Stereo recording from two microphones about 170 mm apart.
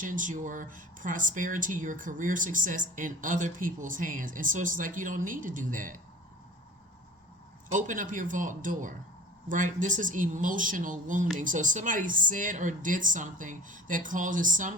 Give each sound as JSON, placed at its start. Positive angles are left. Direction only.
{"t": 0.0, "sound": "speech", "side_deg": -50}
{"t": 7.7, "sound": "speech", "side_deg": -50}